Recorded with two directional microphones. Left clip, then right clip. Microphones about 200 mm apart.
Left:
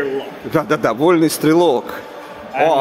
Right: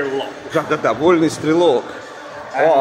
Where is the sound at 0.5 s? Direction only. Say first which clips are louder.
Left 1 dB; 55° left (ahead or behind).